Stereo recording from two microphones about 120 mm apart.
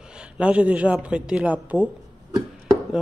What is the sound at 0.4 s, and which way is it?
Speech, 10° right (ahead or behind).